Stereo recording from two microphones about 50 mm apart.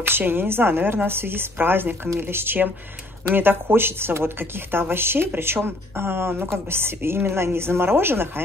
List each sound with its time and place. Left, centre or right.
0.0 s speech: right